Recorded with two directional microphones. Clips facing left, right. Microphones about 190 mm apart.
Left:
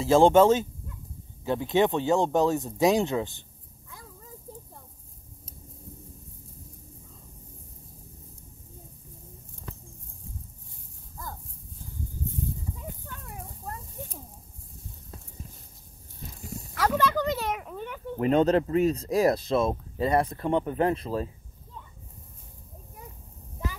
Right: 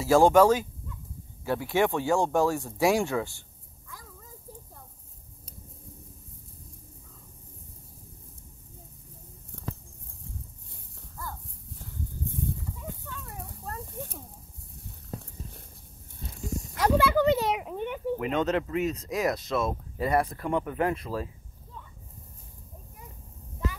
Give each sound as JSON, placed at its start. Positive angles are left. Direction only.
{"t": 0.0, "sound": "speech", "side_deg": 25}
{"t": 16.7, "sound": "a sound", "side_deg": -15}
{"t": 18.2, "sound": "speech", "side_deg": 35}